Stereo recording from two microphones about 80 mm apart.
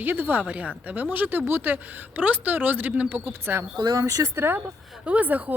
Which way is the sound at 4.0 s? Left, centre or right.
Right.